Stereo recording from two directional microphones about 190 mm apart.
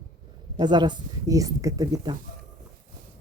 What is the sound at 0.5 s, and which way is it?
Speech, 25° right (ahead or behind).